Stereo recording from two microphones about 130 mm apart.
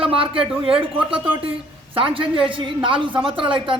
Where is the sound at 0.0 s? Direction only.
45° right (ahead or behind).